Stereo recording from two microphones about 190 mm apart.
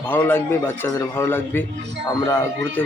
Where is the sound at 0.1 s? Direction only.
10° left (ahead or behind).